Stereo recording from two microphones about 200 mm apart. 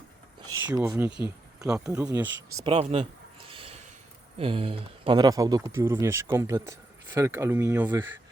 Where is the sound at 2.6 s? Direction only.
30° right (ahead or behind).